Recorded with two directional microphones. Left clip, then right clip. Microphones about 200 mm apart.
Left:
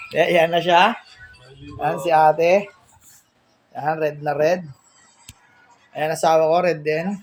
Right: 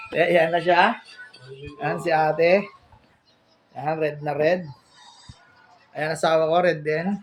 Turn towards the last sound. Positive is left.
turn(degrees=10)  # may be behind; listen again after turning